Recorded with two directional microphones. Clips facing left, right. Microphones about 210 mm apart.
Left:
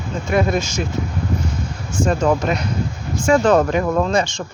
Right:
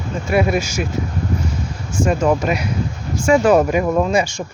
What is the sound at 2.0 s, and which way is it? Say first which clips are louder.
Speech: right 1 dB; 10° right (ahead or behind).